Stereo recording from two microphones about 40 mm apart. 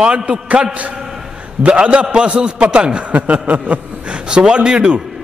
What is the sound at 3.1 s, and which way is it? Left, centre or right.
Speech, right.